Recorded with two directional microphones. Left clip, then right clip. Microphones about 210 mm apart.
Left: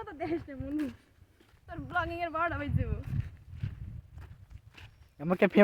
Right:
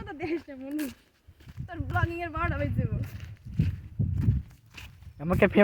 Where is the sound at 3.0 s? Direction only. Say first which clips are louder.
Right 2 dB; 55° right (ahead or behind).